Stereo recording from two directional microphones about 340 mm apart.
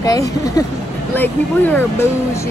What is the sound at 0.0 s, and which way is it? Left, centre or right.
Speech, centre.